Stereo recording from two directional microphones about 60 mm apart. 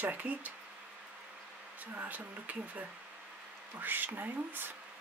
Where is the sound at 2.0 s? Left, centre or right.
Right.